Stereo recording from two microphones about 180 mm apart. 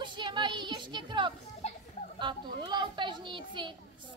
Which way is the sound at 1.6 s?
35° left (ahead or behind).